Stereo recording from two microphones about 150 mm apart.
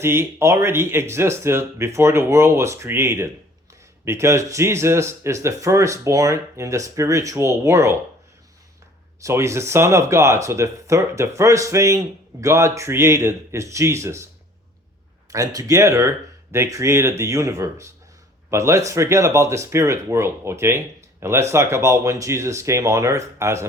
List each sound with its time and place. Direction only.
0.0 s speech: 15° right (ahead or behind)
9.2 s speech: 20° right (ahead or behind)
15.3 s speech: 20° right (ahead or behind)